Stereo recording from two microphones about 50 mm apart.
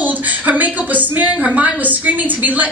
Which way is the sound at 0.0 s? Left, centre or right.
Right.